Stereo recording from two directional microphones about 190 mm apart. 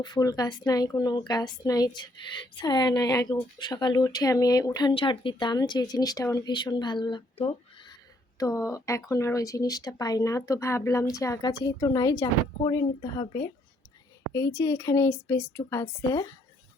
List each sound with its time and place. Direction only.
0.0 s speech: 20° left (ahead or behind)
8.4 s speech: 15° left (ahead or behind)